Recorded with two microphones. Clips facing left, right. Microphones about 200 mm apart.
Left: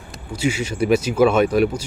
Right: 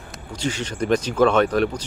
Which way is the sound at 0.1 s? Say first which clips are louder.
Left 5 dB; 10° left (ahead or behind).